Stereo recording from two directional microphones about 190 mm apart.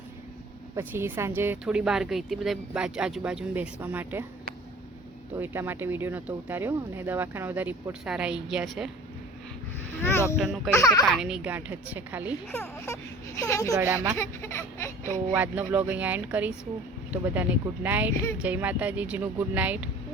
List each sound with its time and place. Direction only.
0.8 s speech: 10° right (ahead or behind)
5.4 s speech: 10° right (ahead or behind)
10.0 s a sound: 10° left (ahead or behind)
10.2 s speech: 5° right (ahead or behind)
10.7 s speech: 15° left (ahead or behind)
11.1 s speech: 5° right (ahead or behind)
12.5 s speech: 15° left (ahead or behind)
13.7 s speech: 10° right (ahead or behind)
14.2 s speech: 10° left (ahead or behind)
15.4 s speech: 10° right (ahead or behind)